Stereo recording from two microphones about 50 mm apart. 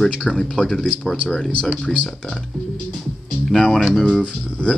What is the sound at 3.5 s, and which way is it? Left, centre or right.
Speech, centre.